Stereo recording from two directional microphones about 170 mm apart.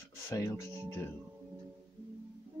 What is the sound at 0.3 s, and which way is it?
Speech, 20° left (ahead or behind).